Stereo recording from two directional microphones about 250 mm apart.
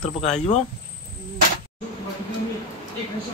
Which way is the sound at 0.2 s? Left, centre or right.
Left.